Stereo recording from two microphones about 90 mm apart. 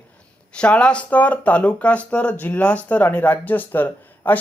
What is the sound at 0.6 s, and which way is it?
Speech, 10° left (ahead or behind).